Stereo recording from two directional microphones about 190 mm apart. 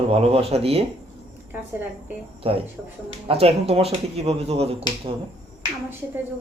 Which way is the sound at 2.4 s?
30° right (ahead or behind).